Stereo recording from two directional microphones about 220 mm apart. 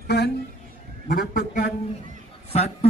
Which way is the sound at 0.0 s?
50° left (ahead or behind).